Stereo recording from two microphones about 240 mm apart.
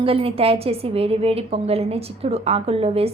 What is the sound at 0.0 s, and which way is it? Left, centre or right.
A woman's voice, right.